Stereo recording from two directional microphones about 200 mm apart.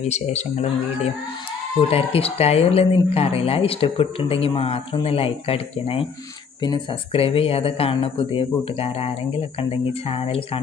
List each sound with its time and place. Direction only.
0.0 s speech: 35° left (ahead or behind)